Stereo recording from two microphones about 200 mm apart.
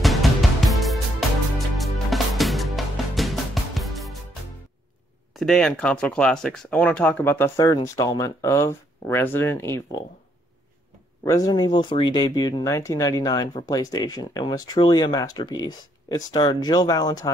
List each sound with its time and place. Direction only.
0.0 s music: centre (ahead or behind)
5.3 s speech: centre (ahead or behind)
11.2 s speech: 20° left (ahead or behind)